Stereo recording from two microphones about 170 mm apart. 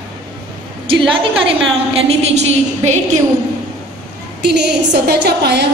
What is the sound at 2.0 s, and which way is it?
Speech, 40° right (ahead or behind).